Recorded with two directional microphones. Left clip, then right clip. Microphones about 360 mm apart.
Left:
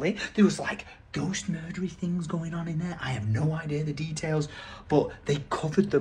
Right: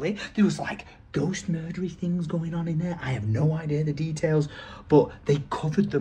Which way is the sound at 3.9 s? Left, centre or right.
Right.